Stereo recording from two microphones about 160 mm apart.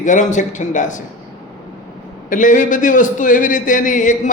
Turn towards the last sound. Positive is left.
turn(degrees=50)  # may be behind; listen again after turning